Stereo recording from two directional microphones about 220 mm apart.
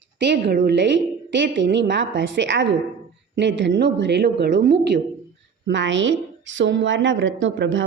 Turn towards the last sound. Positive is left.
turn(degrees=-55)  # may be behind; listen again after turning